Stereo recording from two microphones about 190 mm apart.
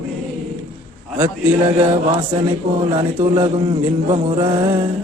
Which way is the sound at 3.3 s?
25° right (ahead or behind).